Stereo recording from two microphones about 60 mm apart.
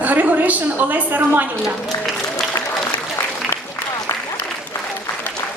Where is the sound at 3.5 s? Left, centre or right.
Left.